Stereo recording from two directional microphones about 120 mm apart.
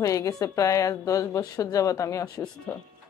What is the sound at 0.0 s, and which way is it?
Speech, 25° left (ahead or behind).